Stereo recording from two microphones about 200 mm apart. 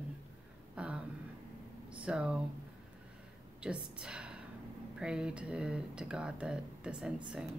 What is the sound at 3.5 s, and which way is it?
Speech, 5° right (ahead or behind).